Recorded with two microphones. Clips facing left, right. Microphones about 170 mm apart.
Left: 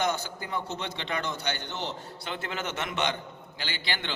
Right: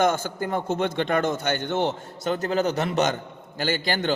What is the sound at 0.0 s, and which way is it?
A man's voice, 50° right (ahead or behind).